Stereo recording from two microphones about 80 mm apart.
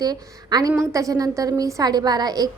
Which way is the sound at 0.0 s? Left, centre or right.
Right.